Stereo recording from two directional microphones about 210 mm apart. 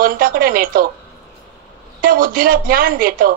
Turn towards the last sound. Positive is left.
turn(degrees=-40)  # may be behind; listen again after turning